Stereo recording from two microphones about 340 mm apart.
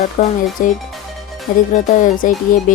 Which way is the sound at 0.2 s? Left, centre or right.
Left.